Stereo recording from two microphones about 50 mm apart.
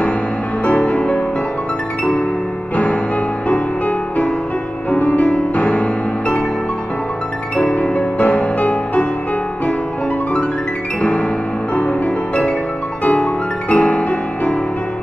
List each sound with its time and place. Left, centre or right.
0.7 s music: left
2.7 s music: left
4.9 s music: left
7.7 s music: left
11.0 s piano: left
13.0 s music: left